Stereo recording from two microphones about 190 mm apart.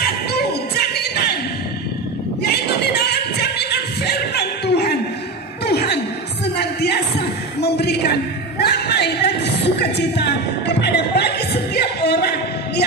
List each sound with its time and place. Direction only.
0.0 s music: 55° left (ahead or behind)
2.4 s music: 60° left (ahead or behind)
5.7 s chuckle: 60° left (ahead or behind)
6.4 s a sound: 60° left (ahead or behind)